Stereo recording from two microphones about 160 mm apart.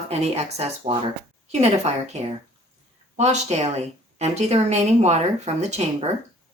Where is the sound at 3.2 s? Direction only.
45° right (ahead or behind).